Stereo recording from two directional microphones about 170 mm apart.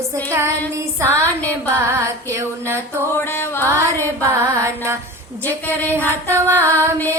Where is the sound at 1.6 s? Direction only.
15° right (ahead or behind).